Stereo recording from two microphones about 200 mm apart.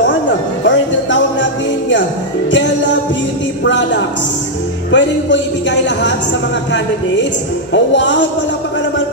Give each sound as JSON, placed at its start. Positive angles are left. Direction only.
{"t": 0.7, "sound": "music", "side_deg": 65}
{"t": 3.6, "sound": "a sound", "side_deg": 65}
{"t": 4.9, "sound": "a man's voice", "side_deg": 65}
{"t": 7.7, "sound": "a man's voice", "side_deg": 65}